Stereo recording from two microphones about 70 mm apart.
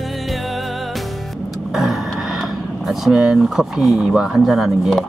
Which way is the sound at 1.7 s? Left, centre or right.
Centre.